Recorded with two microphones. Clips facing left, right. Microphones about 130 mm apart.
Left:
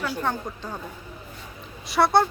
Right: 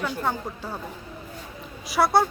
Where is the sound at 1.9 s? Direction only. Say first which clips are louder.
Left 1 dB; centre (ahead or behind).